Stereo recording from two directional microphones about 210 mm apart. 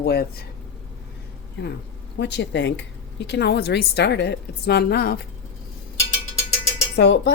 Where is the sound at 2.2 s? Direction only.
55° left (ahead or behind).